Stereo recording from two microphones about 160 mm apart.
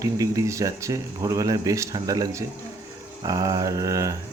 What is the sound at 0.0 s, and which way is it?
Speech, 20° right (ahead or behind).